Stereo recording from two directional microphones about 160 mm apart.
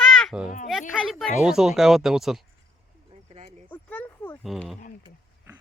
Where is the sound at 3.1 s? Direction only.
40° right (ahead or behind).